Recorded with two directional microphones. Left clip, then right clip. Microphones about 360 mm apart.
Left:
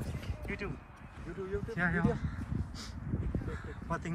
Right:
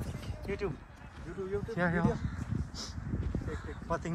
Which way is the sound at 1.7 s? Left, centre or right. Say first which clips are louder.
Even; centre.